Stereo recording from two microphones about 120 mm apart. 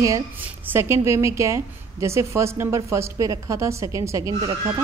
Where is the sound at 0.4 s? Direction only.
20° right (ahead or behind).